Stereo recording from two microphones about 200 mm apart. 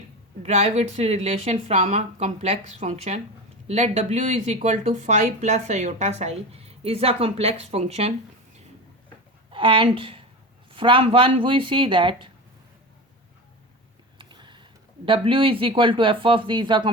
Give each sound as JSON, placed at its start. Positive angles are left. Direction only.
{"t": 0.4, "sound": "speech", "side_deg": -35}
{"t": 9.5, "sound": "a woman's voice", "side_deg": -25}
{"t": 14.2, "sound": "speech", "side_deg": -25}